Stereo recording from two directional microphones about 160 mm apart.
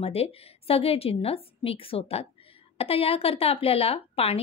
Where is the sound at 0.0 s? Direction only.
40° left (ahead or behind).